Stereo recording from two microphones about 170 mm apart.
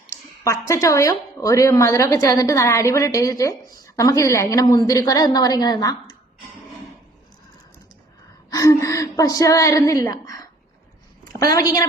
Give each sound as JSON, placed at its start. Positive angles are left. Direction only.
{"t": 0.1, "sound": "speech", "side_deg": 20}
{"t": 8.4, "sound": "speech", "side_deg": 20}